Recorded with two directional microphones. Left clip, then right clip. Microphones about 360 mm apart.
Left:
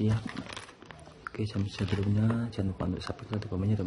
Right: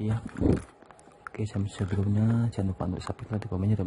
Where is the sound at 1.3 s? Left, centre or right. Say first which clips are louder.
Even; centre.